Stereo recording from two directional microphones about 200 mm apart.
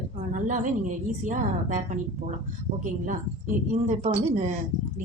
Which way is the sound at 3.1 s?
40° right (ahead or behind).